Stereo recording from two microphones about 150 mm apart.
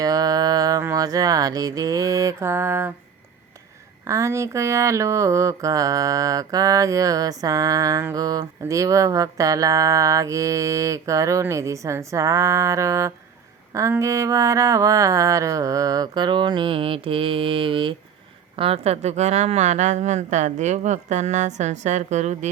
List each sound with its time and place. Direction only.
0.0 s a sound: 25° right (ahead or behind)
4.0 s mantra: 20° right (ahead or behind)
18.5 s a woman's voice: 40° right (ahead or behind)